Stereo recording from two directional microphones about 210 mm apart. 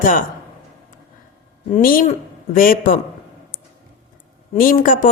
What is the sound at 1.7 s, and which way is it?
A woman's voice, 40° left (ahead or behind).